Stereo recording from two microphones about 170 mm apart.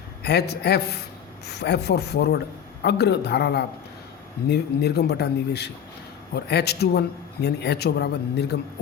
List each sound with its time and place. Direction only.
0.2 s speech: 75° left (ahead or behind)